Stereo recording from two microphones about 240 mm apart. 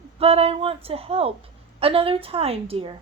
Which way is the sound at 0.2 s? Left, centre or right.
Right.